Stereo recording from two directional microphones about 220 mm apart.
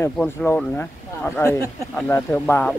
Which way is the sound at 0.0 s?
10° left (ahead or behind).